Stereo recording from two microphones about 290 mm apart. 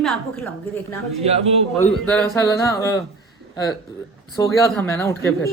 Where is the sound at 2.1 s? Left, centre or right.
Centre.